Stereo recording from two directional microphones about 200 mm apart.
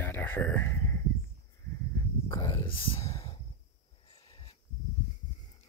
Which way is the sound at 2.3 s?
15° left (ahead or behind).